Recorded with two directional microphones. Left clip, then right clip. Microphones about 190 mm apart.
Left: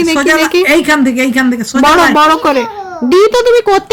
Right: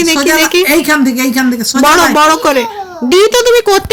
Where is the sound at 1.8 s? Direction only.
Centre (ahead or behind).